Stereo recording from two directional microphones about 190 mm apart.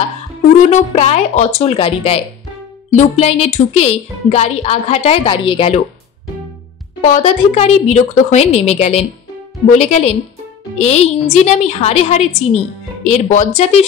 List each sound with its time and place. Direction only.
0.7 s speech: 35° left (ahead or behind)
7.0 s speech: 40° left (ahead or behind)